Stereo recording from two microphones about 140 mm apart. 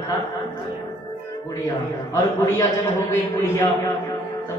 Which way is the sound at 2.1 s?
20° left (ahead or behind).